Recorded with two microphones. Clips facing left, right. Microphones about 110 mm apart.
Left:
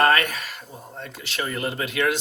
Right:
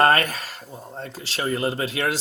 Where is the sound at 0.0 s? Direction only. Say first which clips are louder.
Right 1 dB; 35° right (ahead or behind).